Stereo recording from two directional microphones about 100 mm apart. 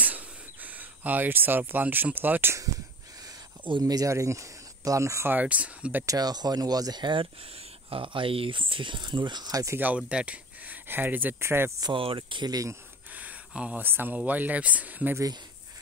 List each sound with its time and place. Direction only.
0.0 s a sound: 15° right (ahead or behind)
3.8 s speech: 35° right (ahead or behind); by 6.0 s 15° right (ahead or behind)
6.0 s speech: 40° right (ahead or behind)
9.8 s speech: 15° right (ahead or behind)
11.9 s speech: 60° right (ahead or behind); by 12.7 s 40° right (ahead or behind)
13.1 s speech: 15° right (ahead or behind)